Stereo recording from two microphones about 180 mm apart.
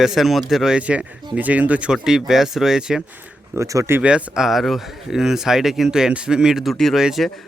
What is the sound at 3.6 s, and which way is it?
Speech, 15° right (ahead or behind).